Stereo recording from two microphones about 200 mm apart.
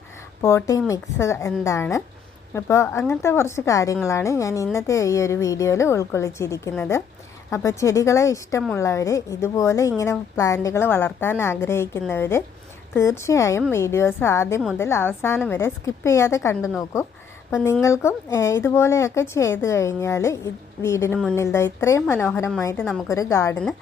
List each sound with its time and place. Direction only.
0.4 s speech: 15° left (ahead or behind)